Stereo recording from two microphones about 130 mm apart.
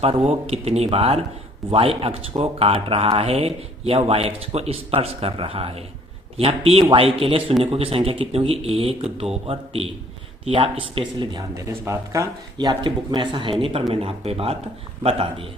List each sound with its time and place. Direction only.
0.0 s speech: 50° right (ahead or behind)
11.5 s speech: 25° right (ahead or behind); by 15.4 s 45° right (ahead or behind)